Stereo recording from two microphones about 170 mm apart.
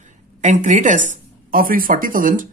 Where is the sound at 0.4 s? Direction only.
45° right (ahead or behind).